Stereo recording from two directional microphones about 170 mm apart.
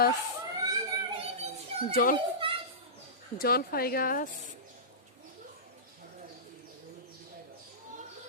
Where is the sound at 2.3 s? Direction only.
30° right (ahead or behind).